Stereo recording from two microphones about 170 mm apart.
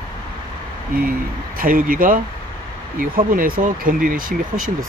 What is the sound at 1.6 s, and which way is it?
Speech, 55° right (ahead or behind).